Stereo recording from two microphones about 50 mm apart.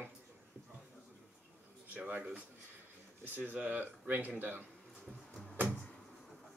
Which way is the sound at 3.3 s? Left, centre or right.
Right.